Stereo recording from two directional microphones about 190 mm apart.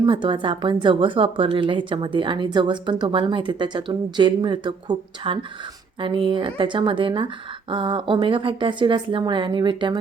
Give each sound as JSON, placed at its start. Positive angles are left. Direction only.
{"t": 0.0, "sound": "a woman's voice", "side_deg": -25}